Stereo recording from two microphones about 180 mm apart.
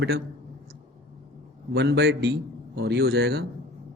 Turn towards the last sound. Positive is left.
turn(degrees=-60)  # may be behind; listen again after turning